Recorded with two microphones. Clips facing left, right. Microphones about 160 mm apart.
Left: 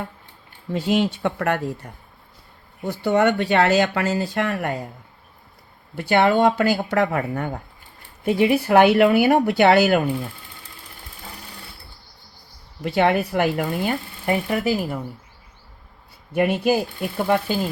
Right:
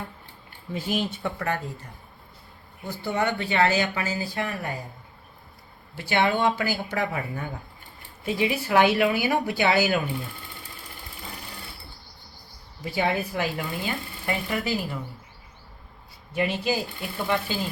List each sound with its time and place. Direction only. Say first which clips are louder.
0.7 s speech: left 7 dB; 75° left (ahead or behind)
2.8 s speech: left 8 dB; 70° left (ahead or behind)
6.0 s speech: left 6 dB; 55° left (ahead or behind)
12.8 s speech: left 7 dB; 70° left (ahead or behind); by 14.6 s 55° left (ahead or behind)
16.3 s speech: left 7 dB; 55° left (ahead or behind)